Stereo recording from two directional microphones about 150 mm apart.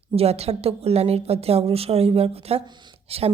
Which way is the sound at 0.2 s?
45° right (ahead or behind).